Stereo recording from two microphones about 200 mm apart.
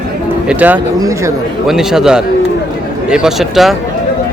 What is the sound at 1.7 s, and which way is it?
Speech, centre (ahead or behind).